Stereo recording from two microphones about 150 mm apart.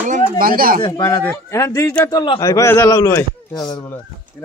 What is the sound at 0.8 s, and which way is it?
Speech, 30° left (ahead or behind).